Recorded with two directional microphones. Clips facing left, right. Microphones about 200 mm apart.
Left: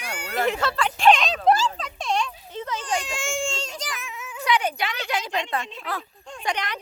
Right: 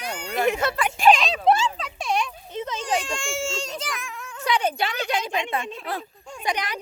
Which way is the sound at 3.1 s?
Centre (ahead or behind).